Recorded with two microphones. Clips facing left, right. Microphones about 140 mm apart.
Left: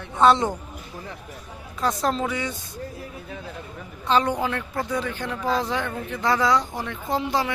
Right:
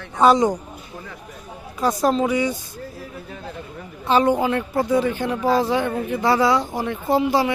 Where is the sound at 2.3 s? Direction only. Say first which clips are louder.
Right 8 dB; 20° right (ahead or behind).